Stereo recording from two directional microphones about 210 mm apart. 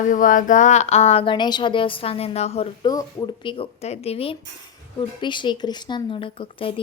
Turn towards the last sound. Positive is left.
turn(degrees=25)  # may be behind; listen again after turning